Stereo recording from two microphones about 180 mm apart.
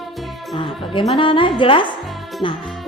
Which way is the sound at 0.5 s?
30° left (ahead or behind).